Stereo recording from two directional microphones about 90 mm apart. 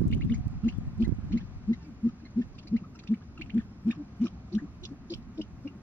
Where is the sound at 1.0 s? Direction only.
20° left (ahead or behind).